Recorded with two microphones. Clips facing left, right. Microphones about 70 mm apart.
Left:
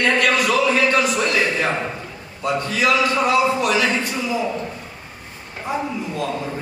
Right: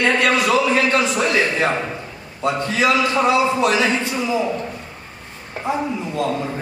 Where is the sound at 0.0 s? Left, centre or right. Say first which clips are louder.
Right 1 dB; right.